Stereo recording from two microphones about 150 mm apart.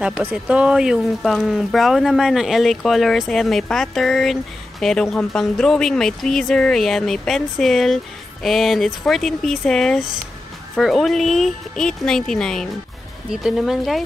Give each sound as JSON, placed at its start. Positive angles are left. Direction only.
{"t": 0.0, "sound": "speech", "side_deg": -10}